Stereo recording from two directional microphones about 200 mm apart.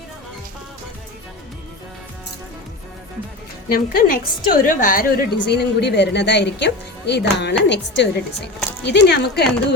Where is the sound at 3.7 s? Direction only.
50° left (ahead or behind).